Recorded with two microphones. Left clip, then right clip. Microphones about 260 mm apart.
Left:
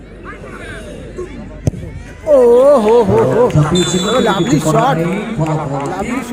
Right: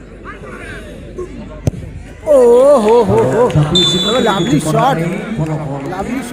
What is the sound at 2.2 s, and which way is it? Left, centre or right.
A man's voice, centre.